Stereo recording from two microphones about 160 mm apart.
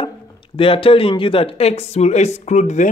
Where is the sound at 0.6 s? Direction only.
35° left (ahead or behind).